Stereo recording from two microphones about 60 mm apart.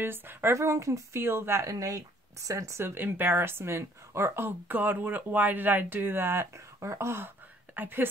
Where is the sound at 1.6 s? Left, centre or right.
Right.